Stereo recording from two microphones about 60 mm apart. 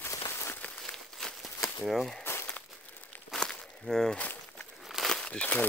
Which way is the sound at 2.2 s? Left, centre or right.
Left.